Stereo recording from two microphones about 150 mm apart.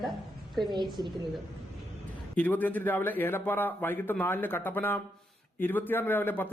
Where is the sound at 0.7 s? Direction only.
30° right (ahead or behind).